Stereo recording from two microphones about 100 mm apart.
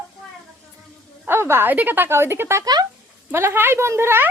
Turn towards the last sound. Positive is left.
turn(degrees=-25)  # may be behind; listen again after turning